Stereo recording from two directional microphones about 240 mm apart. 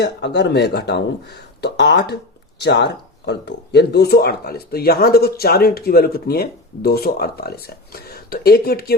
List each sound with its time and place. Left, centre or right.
0.0 s speech: left